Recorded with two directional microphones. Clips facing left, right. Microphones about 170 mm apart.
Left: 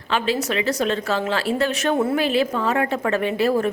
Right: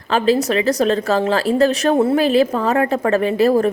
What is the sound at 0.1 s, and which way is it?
A woman's voice, 40° right (ahead or behind).